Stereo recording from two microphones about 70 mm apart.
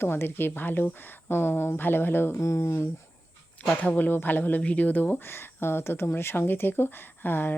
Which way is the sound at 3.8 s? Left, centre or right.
Left.